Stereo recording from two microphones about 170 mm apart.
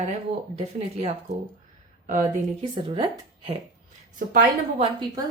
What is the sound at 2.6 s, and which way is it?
Speech, 35° right (ahead or behind).